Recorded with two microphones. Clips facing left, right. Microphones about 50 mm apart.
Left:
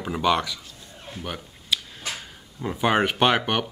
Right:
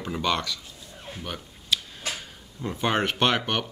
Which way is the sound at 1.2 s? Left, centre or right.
Centre.